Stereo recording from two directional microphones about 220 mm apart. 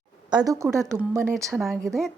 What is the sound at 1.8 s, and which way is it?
Speech, centre (ahead or behind).